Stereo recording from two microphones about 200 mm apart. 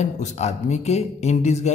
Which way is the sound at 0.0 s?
35° left (ahead or behind).